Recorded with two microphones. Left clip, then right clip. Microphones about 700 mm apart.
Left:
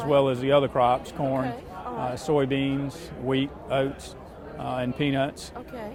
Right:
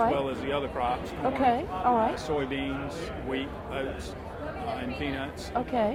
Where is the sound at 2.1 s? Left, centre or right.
Left.